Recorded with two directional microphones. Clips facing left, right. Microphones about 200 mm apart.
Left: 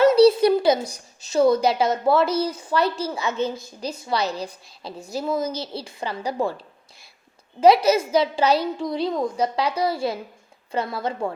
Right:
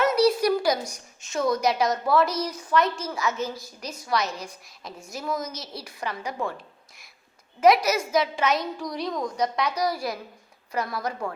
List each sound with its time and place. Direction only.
0.0 s a woman's voice: 30° left (ahead or behind)
7.6 s a woman's voice: 30° left (ahead or behind)